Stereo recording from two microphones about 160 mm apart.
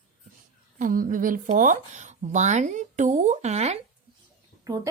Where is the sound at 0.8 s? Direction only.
60° right (ahead or behind); by 3.7 s 45° right (ahead or behind).